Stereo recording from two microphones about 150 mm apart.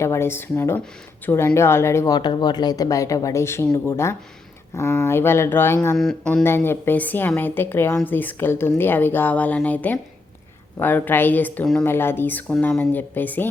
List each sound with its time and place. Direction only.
0.0 s a woman's voice: 15° left (ahead or behind)
6.0 s a woman's voice: 5° left (ahead or behind)